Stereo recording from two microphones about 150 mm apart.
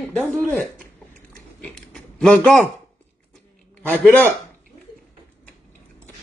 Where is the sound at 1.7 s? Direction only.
5° left (ahead or behind).